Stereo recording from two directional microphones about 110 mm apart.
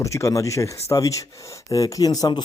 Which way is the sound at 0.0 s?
30° left (ahead or behind).